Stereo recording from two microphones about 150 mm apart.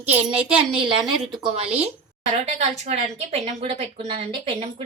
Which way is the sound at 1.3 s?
40° right (ahead or behind).